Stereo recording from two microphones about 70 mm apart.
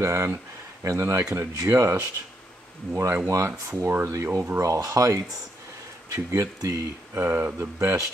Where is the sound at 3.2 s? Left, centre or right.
Right.